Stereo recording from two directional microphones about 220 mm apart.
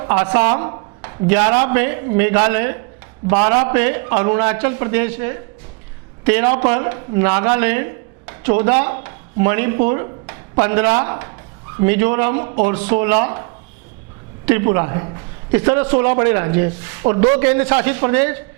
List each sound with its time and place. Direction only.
0.0 s a man's voice: 20° right (ahead or behind)
1.0 s a man's voice: 15° right (ahead or behind)
6.5 s a man's voice: 35° right (ahead or behind)
6.7 s a man's voice: 20° right (ahead or behind)
8.4 s a man's voice: 25° right (ahead or behind)
8.7 s a man's voice: 15° right (ahead or behind); by 12.8 s 30° right (ahead or behind)
13.0 s a man's voice: 15° right (ahead or behind)
14.6 s a man's voice: 25° right (ahead or behind)